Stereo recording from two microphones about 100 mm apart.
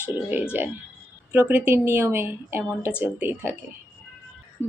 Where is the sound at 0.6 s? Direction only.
20° right (ahead or behind).